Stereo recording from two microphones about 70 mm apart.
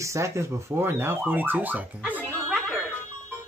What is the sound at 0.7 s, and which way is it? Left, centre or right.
Speech, right.